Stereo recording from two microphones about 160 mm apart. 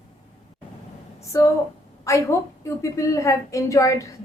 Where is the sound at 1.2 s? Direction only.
20° left (ahead or behind).